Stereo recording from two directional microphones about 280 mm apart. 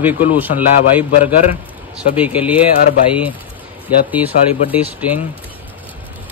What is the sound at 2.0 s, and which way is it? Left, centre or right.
Speech, centre.